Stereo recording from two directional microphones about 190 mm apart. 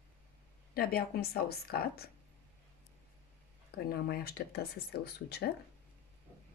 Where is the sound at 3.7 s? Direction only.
55° left (ahead or behind).